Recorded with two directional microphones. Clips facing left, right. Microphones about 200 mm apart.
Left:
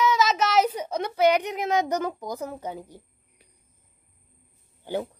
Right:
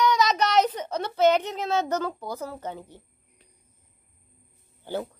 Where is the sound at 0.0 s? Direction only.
5° left (ahead or behind).